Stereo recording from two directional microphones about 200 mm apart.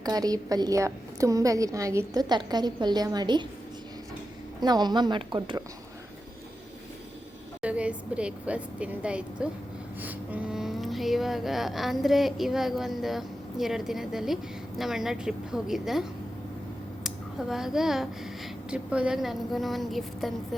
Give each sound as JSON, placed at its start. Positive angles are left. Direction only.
{"t": 0.0, "sound": "a woman's voice", "side_deg": -20}
{"t": 4.6, "sound": "a woman's voice", "side_deg": -20}
{"t": 7.6, "sound": "a woman's voice", "side_deg": -5}
{"t": 17.5, "sound": "a woman's voice", "side_deg": 0}